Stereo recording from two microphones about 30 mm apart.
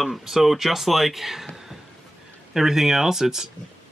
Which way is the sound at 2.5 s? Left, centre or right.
Centre.